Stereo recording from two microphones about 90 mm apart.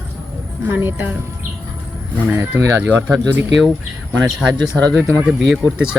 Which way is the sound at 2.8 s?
20° right (ahead or behind).